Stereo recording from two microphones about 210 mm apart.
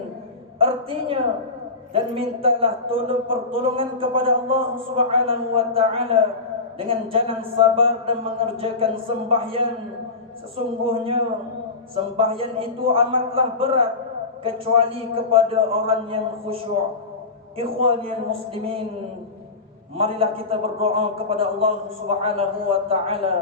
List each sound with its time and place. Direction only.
0.6 s a woman's voice: 25° right (ahead or behind)
10.8 s a man's voice: 25° right (ahead or behind)
17.6 s a man's voice: 25° right (ahead or behind)
20.0 s a man's voice: 25° right (ahead or behind)